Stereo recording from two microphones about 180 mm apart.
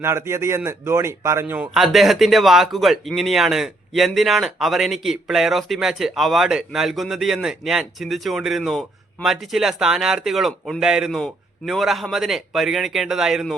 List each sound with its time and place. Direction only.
0.0 s speech: 15° right (ahead or behind)
1.7 s speech: centre (ahead or behind)